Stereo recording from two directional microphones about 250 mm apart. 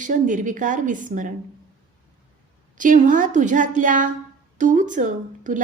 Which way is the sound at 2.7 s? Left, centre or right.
Right.